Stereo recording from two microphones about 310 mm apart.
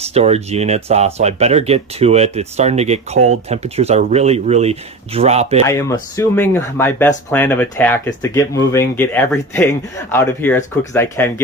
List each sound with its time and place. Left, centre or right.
0.0 s speech: centre
5.7 s speech: centre